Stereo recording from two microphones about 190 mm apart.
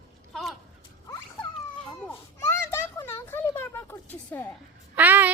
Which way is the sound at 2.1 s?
15° left (ahead or behind).